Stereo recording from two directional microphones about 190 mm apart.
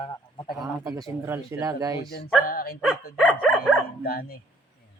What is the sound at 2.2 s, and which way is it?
Speech, 50° left (ahead or behind).